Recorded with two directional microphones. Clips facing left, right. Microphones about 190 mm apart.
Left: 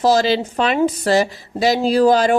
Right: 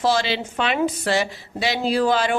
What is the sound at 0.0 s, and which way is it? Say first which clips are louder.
Speech: left 6 dB; 40° left (ahead or behind).